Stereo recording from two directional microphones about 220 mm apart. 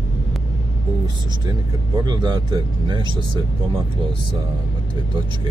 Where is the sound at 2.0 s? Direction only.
20° right (ahead or behind).